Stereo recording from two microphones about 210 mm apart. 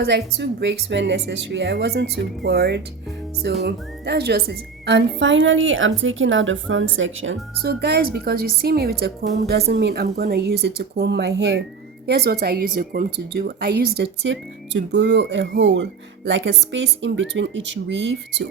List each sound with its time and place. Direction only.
0.0 s a woman's voice: 50° right (ahead or behind); by 7.3 s 65° right (ahead or behind)
7.6 s a woman's voice: 50° right (ahead or behind)